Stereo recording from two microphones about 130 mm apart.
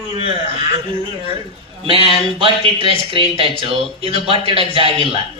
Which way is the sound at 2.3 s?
45° right (ahead or behind).